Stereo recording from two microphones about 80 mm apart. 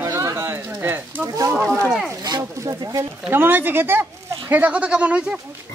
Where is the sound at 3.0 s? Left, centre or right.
Right.